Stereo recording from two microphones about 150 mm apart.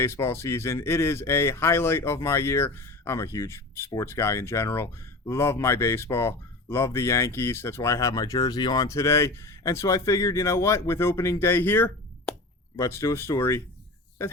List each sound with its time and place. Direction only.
0.0 s speech: 15° left (ahead or behind)